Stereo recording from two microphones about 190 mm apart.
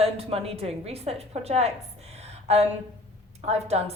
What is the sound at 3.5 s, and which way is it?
Speech, 35° right (ahead or behind).